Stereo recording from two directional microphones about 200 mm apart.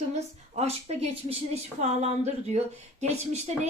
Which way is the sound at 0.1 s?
35° right (ahead or behind).